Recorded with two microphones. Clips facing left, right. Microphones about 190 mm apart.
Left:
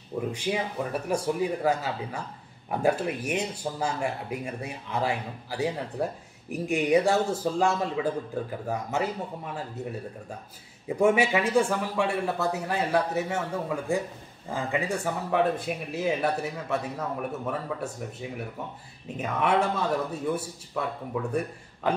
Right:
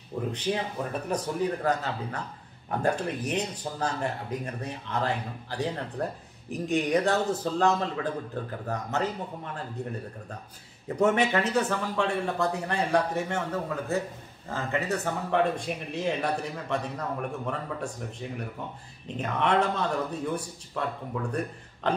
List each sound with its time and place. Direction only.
0.3 s speech: 10° left (ahead or behind)